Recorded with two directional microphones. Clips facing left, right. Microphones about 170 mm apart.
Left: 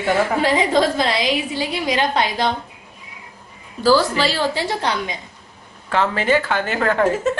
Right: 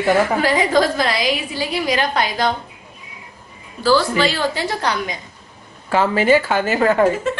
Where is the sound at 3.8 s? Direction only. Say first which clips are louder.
Even; 35° left (ahead or behind).